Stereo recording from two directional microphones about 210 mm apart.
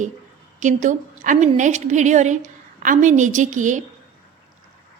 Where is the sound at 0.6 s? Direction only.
35° right (ahead or behind).